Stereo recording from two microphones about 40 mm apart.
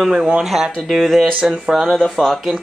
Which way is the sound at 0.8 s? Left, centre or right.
Centre.